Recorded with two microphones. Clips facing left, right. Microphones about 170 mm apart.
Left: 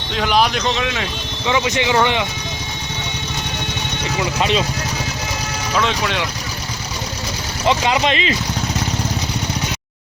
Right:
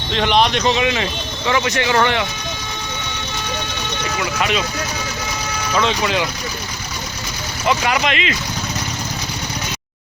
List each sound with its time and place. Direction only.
0.1 s speech: 5° left (ahead or behind)
1.5 s speech: 15° left (ahead or behind)
4.4 s speech: 30° left (ahead or behind)
5.7 s speech: centre (ahead or behind)
7.8 s speech: 20° left (ahead or behind)
8.0 s speech: 35° left (ahead or behind)